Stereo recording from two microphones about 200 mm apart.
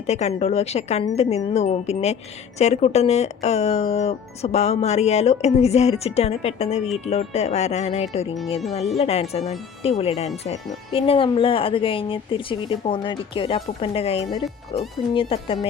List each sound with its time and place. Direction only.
0.1 s a woman's voice: 35° left (ahead or behind)